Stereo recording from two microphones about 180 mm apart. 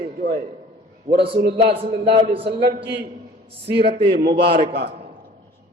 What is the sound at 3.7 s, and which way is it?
Speech, 65° right (ahead or behind).